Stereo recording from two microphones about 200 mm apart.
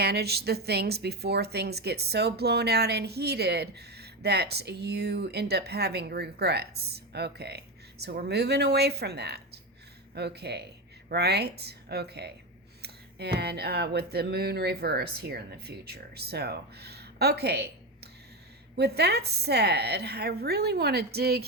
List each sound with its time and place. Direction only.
0.0 s speech: 55° right (ahead or behind)